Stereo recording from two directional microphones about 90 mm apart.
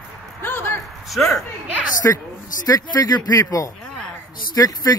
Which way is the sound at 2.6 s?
45° left (ahead or behind).